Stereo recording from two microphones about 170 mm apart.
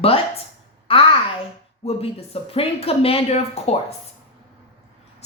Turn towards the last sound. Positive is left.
turn(degrees=35)  # may be behind; listen again after turning